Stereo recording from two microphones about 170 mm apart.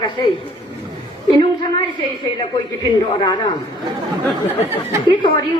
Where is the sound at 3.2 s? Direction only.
25° left (ahead or behind).